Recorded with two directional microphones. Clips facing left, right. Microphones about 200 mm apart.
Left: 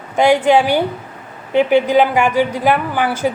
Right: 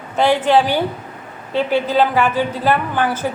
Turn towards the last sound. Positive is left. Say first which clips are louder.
# left 2 dB
turn(degrees=15)  # may be behind; listen again after turning